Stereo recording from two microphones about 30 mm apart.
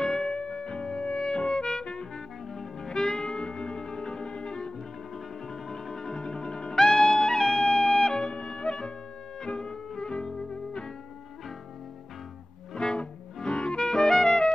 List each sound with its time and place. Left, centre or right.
0.0 s music: left
6.8 s brass instrument: centre
7.1 s music: left
12.7 s music: left